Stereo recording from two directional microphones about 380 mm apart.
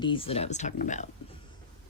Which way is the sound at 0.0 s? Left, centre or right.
Centre.